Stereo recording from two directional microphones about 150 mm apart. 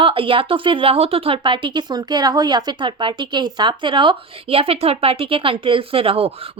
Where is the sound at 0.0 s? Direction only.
35° right (ahead or behind).